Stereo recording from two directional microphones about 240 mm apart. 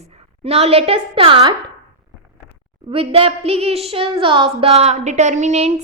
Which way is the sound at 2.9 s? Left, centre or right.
Right.